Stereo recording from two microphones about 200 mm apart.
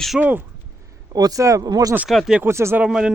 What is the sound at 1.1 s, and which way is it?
Speech, 20° right (ahead or behind).